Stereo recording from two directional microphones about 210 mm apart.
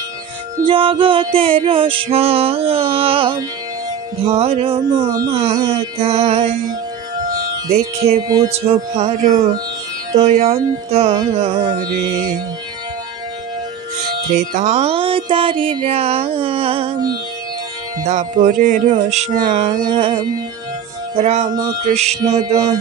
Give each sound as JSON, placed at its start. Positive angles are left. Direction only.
{"t": 0.7, "sound": "speech", "side_deg": -25}
{"t": 7.7, "sound": "speech", "side_deg": -30}
{"t": 10.2, "sound": "speech", "side_deg": -30}
{"t": 14.3, "sound": "speech", "side_deg": -35}
{"t": 19.8, "sound": "speech", "side_deg": -20}
{"t": 22.2, "sound": "music", "side_deg": -15}